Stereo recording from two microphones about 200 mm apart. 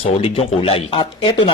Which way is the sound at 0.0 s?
30° left (ahead or behind).